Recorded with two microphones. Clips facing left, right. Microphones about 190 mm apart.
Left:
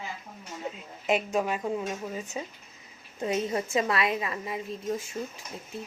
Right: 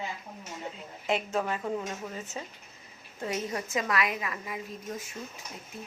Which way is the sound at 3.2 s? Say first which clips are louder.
Left 5 dB; 25° left (ahead or behind).